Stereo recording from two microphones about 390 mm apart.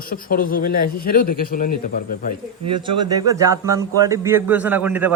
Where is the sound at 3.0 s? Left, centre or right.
Centre.